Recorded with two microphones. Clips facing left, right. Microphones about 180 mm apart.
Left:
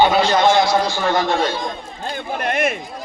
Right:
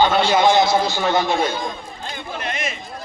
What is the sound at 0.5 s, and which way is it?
Speech, 25° right (ahead or behind).